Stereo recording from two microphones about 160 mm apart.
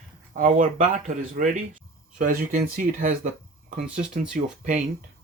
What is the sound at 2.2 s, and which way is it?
Speech, 60° right (ahead or behind).